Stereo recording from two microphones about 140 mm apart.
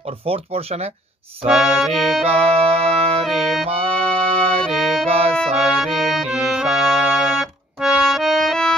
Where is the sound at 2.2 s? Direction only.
45° right (ahead or behind).